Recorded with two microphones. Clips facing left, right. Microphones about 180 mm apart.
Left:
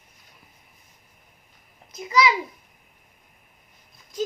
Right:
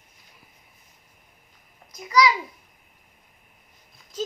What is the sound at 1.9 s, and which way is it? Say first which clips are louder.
Speech: right 1 dB; 25° left (ahead or behind).